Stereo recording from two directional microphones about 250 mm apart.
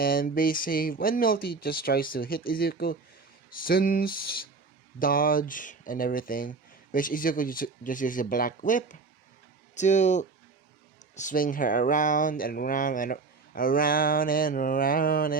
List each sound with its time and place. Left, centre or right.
0.0 s speech: left